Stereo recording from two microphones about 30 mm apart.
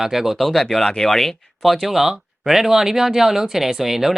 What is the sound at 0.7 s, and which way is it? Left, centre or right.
Speech, centre.